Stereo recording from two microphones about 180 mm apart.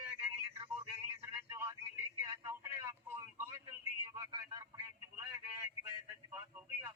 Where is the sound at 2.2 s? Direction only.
15° right (ahead or behind).